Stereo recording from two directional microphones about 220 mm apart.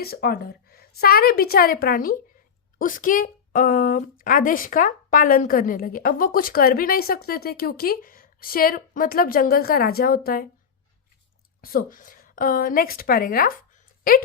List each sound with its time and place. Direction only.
0.0 s a woman's voice: 45° left (ahead or behind)
11.6 s a woman's voice: 40° left (ahead or behind)